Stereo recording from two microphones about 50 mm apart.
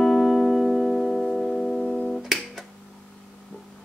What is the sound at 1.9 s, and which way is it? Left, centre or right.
Guitar, left.